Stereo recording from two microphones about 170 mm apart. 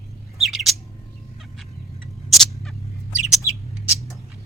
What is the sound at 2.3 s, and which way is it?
Rodents, centre (ahead or behind).